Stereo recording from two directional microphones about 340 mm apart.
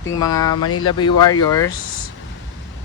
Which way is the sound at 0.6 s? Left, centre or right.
Left.